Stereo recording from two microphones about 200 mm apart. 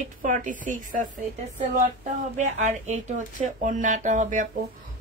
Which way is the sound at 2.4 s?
35° right (ahead or behind).